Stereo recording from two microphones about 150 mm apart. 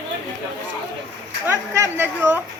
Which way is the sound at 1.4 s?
15° right (ahead or behind).